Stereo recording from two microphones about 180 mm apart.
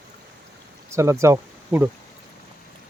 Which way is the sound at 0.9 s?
15° right (ahead or behind).